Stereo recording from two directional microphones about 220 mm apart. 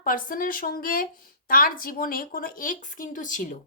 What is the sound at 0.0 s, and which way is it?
A woman's voice, 40° left (ahead or behind).